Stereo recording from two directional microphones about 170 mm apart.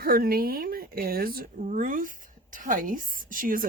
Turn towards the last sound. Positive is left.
turn(degrees=-55)  # may be behind; listen again after turning